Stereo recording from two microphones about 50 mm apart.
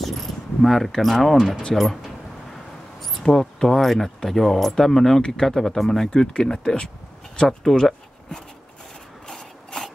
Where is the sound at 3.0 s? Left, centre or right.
Centre.